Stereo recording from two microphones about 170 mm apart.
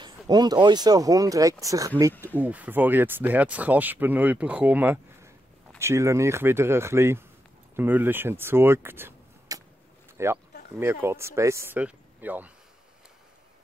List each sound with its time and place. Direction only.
0.0 s speech: 25° right (ahead or behind)